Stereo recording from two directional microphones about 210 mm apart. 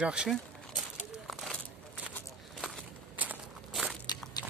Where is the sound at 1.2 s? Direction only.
Centre (ahead or behind).